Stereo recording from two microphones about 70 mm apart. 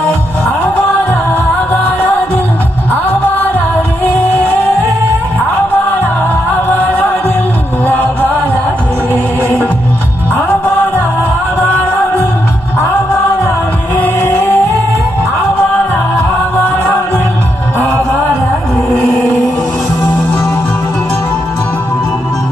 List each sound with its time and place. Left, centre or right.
7.9 s music: left
14.0 s music: left